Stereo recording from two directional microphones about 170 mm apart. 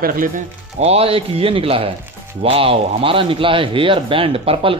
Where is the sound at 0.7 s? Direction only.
35° right (ahead or behind).